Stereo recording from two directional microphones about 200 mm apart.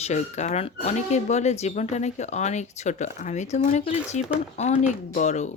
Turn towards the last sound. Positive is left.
turn(degrees=35)  # may be behind; listen again after turning